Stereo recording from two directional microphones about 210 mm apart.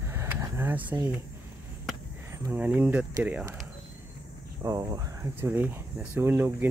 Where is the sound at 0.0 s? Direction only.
10° right (ahead or behind).